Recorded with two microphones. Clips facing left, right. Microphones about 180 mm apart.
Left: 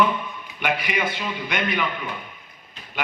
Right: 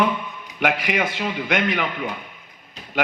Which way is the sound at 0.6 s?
90° right.